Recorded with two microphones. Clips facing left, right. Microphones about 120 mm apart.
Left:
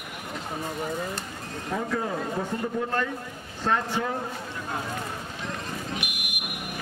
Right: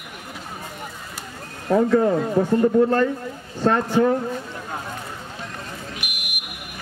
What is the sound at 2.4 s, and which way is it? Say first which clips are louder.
Speech: right 10 dB; 65° right (ahead or behind).